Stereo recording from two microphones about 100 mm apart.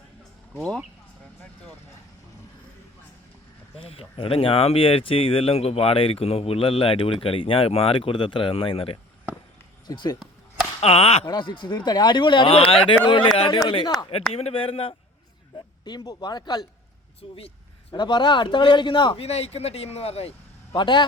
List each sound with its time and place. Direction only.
3.8 s speech: 70° left (ahead or behind)
9.8 s speech: 45° left (ahead or behind)
10.8 s speech: 90° left
11.3 s speech: 55° left (ahead or behind)
11.9 s speech: 45° left (ahead or behind)
12.5 s speech: 65° left (ahead or behind)
13.8 s speech: 45° left (ahead or behind)
14.3 s speech: 75° left (ahead or behind)
15.5 s speech: 45° left (ahead or behind)
17.2 s speech: 80° left
17.9 s speech: 50° left (ahead or behind)
19.2 s speech: 90° left
20.7 s speech: 50° left (ahead or behind)